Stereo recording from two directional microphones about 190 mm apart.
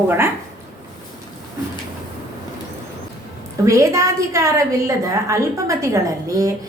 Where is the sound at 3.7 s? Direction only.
15° right (ahead or behind).